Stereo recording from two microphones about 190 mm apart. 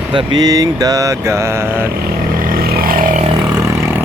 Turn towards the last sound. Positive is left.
turn(degrees=-50)  # may be behind; listen again after turning